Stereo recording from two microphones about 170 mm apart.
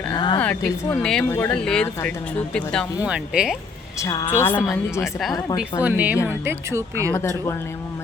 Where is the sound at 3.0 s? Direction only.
5° right (ahead or behind).